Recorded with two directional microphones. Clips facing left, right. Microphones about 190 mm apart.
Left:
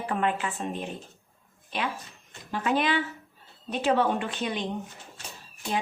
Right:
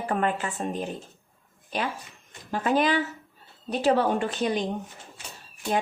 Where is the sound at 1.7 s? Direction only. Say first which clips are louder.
Right 2 dB; 40° right (ahead or behind).